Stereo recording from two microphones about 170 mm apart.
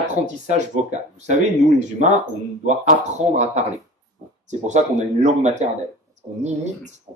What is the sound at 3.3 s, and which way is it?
Speech, 45° right (ahead or behind).